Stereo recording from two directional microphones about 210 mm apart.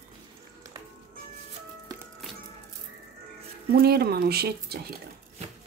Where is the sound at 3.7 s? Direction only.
50° right (ahead or behind).